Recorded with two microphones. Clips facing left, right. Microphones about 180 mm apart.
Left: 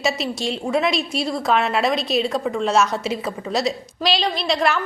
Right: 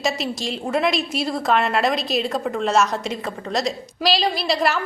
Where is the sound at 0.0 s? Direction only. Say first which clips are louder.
Left 1 dB; centre (ahead or behind).